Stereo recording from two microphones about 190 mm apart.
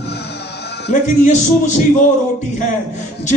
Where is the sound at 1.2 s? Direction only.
40° left (ahead or behind).